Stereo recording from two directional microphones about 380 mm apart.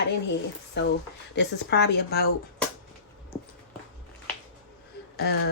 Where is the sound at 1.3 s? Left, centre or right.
Left.